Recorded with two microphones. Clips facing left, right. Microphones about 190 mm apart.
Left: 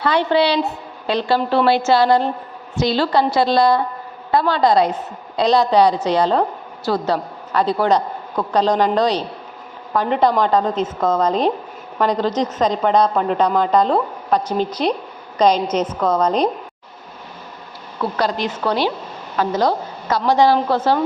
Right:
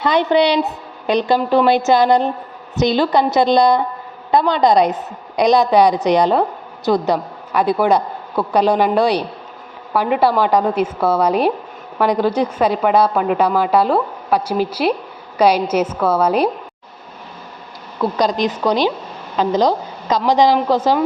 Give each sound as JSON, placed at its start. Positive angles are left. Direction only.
{"t": 0.0, "sound": "a woman's voice", "side_deg": -15}
{"t": 18.0, "sound": "a woman's voice", "side_deg": -15}